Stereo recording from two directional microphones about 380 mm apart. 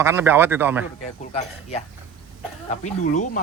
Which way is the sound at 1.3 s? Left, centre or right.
Centre.